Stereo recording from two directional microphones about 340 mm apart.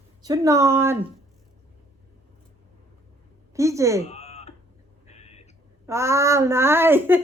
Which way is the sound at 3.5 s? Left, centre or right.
Centre.